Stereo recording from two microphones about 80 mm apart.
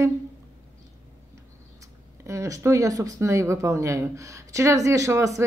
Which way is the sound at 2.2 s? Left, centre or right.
Right.